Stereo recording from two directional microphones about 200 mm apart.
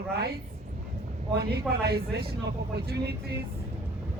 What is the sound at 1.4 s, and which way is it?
A man's voice, 50° right (ahead or behind).